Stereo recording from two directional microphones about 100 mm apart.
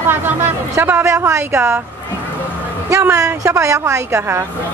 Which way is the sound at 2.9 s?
30° right (ahead or behind).